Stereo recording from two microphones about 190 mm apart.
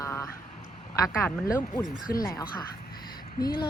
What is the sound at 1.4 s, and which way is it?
Speech, 20° left (ahead or behind).